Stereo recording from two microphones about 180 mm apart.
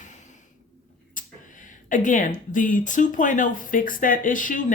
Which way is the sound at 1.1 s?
45° left (ahead or behind).